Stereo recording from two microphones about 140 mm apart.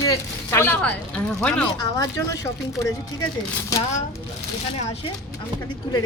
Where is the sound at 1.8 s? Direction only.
25° left (ahead or behind).